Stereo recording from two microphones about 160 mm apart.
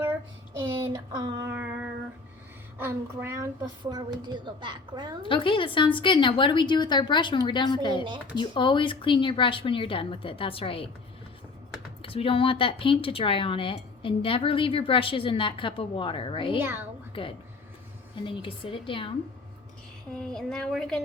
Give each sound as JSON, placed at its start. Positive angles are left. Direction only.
{"t": 0.7, "sound": "a sound", "side_deg": -20}
{"t": 2.7, "sound": "a woman's voice", "side_deg": -15}
{"t": 5.2, "sound": "a woman's voice", "side_deg": 30}
{"t": 12.0, "sound": "speech", "side_deg": 35}
{"t": 16.6, "sound": "a woman's voice", "side_deg": -10}
{"t": 17.1, "sound": "speech", "side_deg": 35}
{"t": 20.1, "sound": "speech", "side_deg": 5}